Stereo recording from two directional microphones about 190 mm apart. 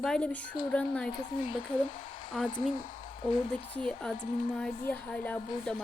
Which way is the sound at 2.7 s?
45° left (ahead or behind).